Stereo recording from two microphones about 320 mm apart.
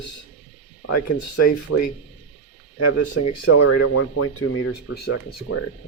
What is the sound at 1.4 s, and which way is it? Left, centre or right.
Speech, left.